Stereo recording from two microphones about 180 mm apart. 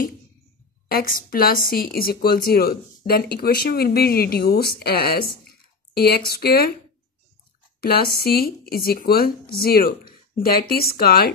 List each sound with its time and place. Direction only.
0.8 s a woman's voice: 55° left (ahead or behind)
7.8 s a woman's voice: 55° left (ahead or behind)